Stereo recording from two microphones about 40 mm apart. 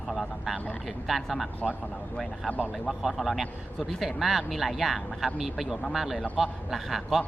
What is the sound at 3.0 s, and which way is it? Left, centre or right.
Speech, centre.